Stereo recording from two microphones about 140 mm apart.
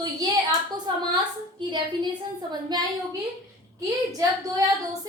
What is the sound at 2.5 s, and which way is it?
A woman's voice, 30° right (ahead or behind).